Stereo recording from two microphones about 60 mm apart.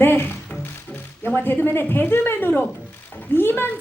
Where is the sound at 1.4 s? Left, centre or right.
Left.